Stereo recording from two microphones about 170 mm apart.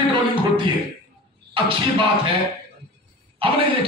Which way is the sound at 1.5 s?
30° right (ahead or behind).